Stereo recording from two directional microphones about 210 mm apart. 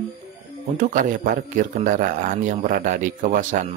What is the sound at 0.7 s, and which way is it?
Speech, 40° right (ahead or behind).